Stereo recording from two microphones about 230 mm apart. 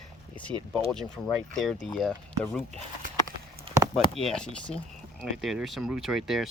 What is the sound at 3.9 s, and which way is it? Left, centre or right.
Speech, centre.